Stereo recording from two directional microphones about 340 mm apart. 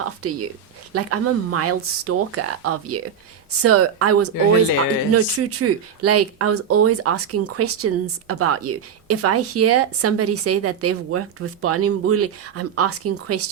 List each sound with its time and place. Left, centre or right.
0.2 s speech: right